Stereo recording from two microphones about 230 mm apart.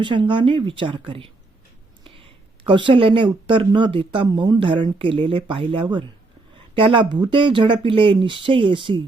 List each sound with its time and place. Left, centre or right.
0.0 s speech: right